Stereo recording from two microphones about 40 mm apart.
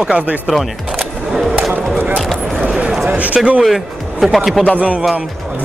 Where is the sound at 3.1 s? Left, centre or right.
Right.